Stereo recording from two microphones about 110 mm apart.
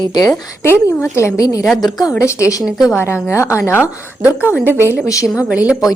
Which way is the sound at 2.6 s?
5° right (ahead or behind).